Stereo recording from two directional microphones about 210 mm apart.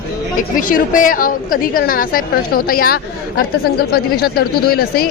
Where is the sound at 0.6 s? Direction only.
40° left (ahead or behind).